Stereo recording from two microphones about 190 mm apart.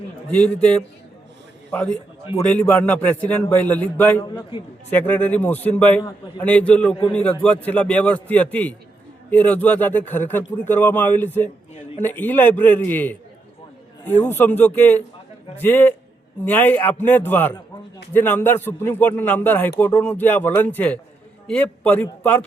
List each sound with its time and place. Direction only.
0.3 s a man's voice: 10° left (ahead or behind)
4.2 s a man's voice: 30° left (ahead or behind)
4.9 s a man's voice: 10° left (ahead or behind)
14.3 s a man's voice: 10° left (ahead or behind)